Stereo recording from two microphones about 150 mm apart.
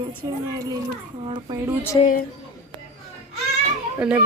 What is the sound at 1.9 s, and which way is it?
Speech, 30° left (ahead or behind).